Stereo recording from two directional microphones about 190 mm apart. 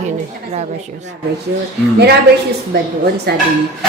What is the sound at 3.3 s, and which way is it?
Speech, 60° right (ahead or behind).